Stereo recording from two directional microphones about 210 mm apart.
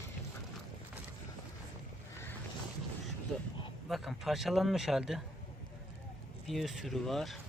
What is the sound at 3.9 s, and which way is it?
A man's voice, centre (ahead or behind).